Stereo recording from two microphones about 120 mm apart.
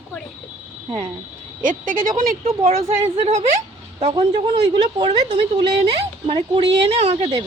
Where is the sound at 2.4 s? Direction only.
60° right (ahead or behind).